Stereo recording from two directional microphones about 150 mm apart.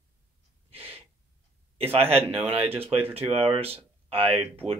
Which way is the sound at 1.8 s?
40° right (ahead or behind).